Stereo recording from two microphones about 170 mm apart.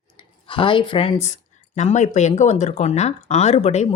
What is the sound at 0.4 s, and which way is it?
Speech, 30° left (ahead or behind).